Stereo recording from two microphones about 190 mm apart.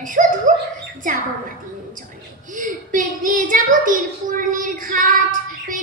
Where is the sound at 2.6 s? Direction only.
45° right (ahead or behind).